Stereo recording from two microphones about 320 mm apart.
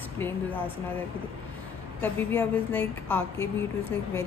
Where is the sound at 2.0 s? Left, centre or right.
Centre.